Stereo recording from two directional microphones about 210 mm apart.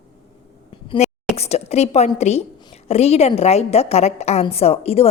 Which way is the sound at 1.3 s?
30° left (ahead or behind).